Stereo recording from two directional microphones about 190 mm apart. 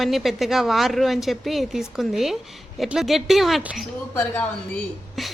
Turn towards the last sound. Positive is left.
turn(degrees=5)  # may be behind; listen again after turning